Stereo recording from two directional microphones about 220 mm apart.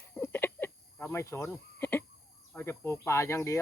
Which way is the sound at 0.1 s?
10° left (ahead or behind).